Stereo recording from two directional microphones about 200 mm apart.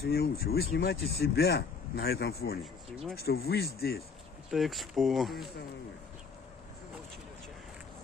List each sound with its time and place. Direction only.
0.1 s speech: 50° left (ahead or behind)
2.6 s speech: centre (ahead or behind)
3.3 s speech: 50° left (ahead or behind)
4.5 s speech: centre (ahead or behind)